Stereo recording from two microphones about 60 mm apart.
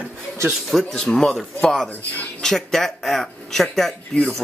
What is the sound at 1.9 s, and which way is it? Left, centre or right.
Speech, left.